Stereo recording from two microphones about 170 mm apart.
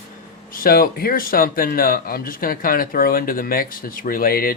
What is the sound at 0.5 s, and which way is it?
Speech, 60° left (ahead or behind).